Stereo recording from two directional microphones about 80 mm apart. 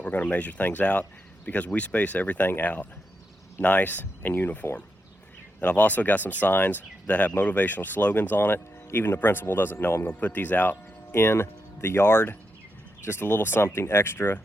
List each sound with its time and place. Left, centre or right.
0.0 s speech: centre